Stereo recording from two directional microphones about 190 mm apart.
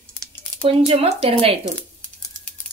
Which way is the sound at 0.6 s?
30° right (ahead or behind).